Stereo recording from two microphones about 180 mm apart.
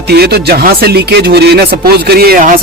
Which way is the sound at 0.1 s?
65° right (ahead or behind).